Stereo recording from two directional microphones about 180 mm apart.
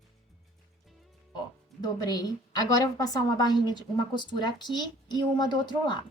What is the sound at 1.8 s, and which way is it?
A woman's voice, 20° left (ahead or behind).